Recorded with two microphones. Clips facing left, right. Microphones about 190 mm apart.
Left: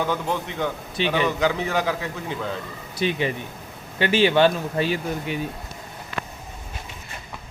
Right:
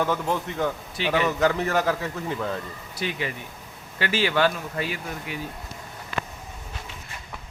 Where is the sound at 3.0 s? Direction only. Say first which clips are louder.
Left 6 dB; 25° left (ahead or behind).